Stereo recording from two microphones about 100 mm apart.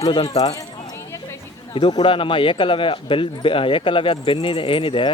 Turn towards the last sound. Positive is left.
turn(degrees=60)  # may be behind; listen again after turning